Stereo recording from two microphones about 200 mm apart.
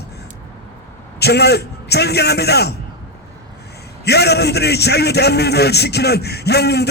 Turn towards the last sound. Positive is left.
turn(degrees=55)  # may be behind; listen again after turning